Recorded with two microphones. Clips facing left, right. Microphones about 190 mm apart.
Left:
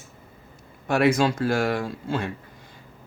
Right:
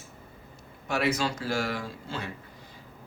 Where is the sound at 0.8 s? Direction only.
55° left (ahead or behind).